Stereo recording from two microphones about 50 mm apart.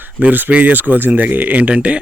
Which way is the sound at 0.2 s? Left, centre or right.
Right.